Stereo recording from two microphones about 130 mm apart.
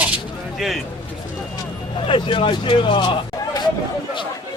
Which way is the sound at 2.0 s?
40° left (ahead or behind).